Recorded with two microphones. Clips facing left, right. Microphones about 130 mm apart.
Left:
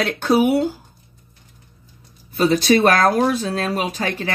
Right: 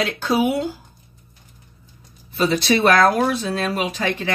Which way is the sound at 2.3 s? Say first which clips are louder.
Left 3 dB; 50° left (ahead or behind).